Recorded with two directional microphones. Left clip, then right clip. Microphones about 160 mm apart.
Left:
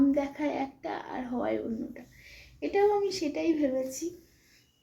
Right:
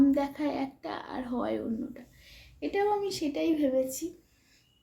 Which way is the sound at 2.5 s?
25° right (ahead or behind).